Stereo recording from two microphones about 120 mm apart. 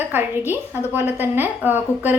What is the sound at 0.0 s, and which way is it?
A woman's voice, 15° right (ahead or behind).